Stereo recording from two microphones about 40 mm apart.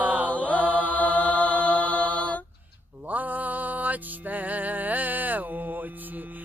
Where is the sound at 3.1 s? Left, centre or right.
Right.